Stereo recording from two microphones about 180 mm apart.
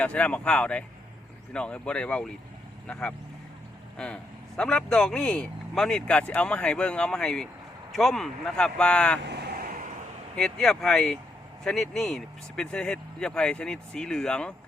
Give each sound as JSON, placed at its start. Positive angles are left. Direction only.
{"t": 0.0, "sound": "speech", "side_deg": 5}
{"t": 9.2, "sound": "vehicle", "side_deg": -65}
{"t": 10.3, "sound": "speech", "side_deg": 5}